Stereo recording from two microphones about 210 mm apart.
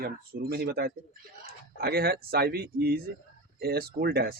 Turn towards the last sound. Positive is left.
turn(degrees=-50)  # may be behind; listen again after turning